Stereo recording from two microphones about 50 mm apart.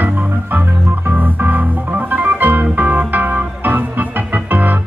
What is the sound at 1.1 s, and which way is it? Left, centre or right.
Organ, right.